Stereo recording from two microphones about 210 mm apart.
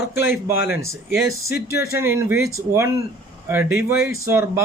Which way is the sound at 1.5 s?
50° left (ahead or behind).